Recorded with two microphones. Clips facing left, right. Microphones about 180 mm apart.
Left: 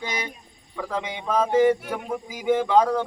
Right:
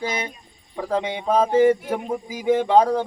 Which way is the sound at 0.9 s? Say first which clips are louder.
Right 5 dB; 30° right (ahead or behind).